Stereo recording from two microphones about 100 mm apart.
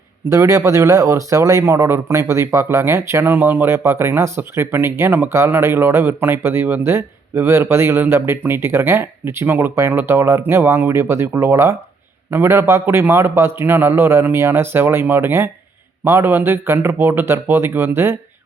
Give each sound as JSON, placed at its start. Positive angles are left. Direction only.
{"t": 0.3, "sound": "speech", "side_deg": -35}